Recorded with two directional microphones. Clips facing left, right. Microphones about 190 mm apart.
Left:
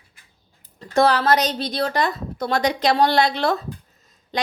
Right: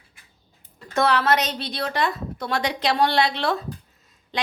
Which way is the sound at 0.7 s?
35° left (ahead or behind).